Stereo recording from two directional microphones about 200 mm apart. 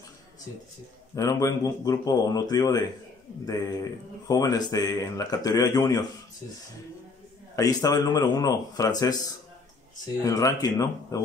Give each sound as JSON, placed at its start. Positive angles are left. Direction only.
{"t": 1.1, "sound": "speech", "side_deg": 15}
{"t": 4.3, "sound": "speech", "side_deg": 15}
{"t": 7.5, "sound": "speech", "side_deg": 15}